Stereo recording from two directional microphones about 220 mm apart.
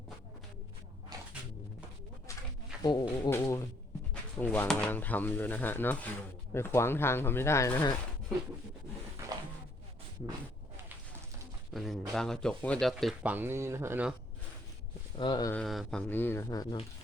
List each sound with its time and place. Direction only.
1.1 s a sound: 20° right (ahead or behind)
2.8 s speech: 15° left (ahead or behind)
11.7 s speech: centre (ahead or behind)
15.2 s speech: 20° left (ahead or behind)
15.5 s speech: centre (ahead or behind); by 16.8 s 20° left (ahead or behind)